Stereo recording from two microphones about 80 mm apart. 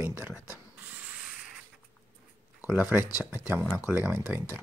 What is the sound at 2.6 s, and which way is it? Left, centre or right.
Speech, centre.